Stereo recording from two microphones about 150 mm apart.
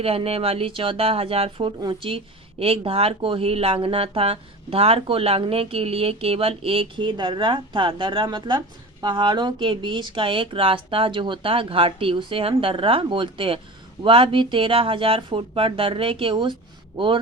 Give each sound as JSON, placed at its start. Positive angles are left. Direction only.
{"t": 0.0, "sound": "speech", "side_deg": -40}